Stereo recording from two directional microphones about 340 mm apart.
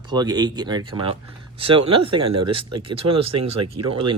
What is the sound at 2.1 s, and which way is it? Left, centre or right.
Speech, right.